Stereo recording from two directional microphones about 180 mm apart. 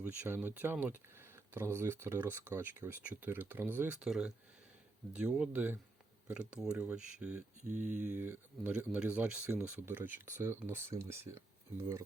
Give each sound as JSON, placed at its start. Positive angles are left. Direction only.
{"t": 0.0, "sound": "speech", "side_deg": -10}